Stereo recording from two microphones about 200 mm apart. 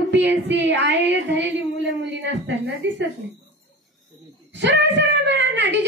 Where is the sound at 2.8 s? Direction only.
65° right (ahead or behind).